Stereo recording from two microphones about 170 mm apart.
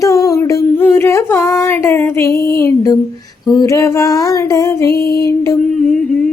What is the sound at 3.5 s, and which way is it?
Child singing, 20° left (ahead or behind).